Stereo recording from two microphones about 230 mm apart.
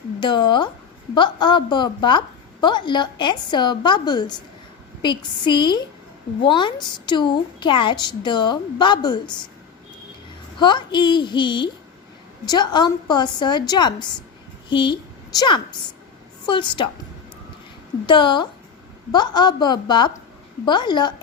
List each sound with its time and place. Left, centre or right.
0.2 s a woman's voice: centre
10.6 s a woman's voice: centre
18.0 s a woman's voice: left